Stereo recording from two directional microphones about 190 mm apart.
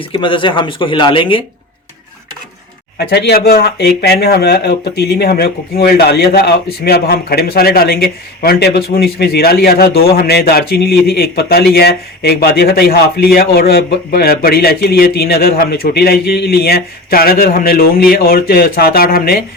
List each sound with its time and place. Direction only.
0.0 s speech: 25° left (ahead or behind)
3.0 s speech: 55° left (ahead or behind)